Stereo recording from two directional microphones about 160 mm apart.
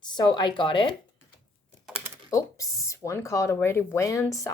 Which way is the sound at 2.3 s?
20° left (ahead or behind).